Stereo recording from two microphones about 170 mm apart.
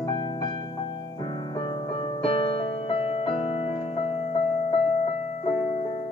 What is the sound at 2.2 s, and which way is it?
Music, 35° left (ahead or behind).